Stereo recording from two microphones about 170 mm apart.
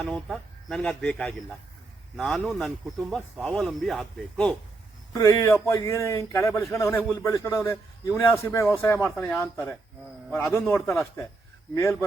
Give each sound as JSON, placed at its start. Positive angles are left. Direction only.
{"t": 0.0, "sound": "speech", "side_deg": 5}
{"t": 5.1, "sound": "a man's voice", "side_deg": 20}